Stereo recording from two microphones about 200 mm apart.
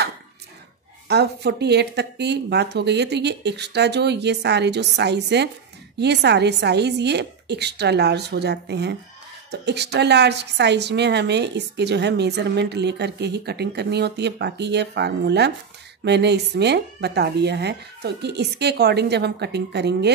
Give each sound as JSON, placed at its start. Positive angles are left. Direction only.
{"t": 1.0, "sound": "a woman's voice", "side_deg": -55}